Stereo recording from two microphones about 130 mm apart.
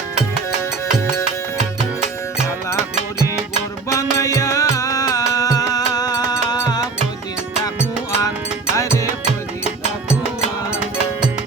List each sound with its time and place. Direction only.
3.8 s music: 25° left (ahead or behind)